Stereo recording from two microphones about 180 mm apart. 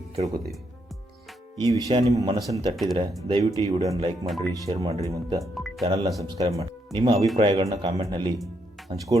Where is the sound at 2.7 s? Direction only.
Centre (ahead or behind).